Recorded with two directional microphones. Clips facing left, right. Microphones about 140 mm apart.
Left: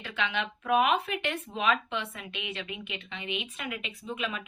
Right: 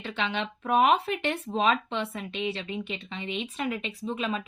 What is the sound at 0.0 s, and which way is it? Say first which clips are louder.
Speech: right 2 dB; 30° right (ahead or behind).